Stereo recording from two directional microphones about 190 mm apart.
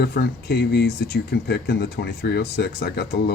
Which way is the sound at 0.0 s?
55° left (ahead or behind).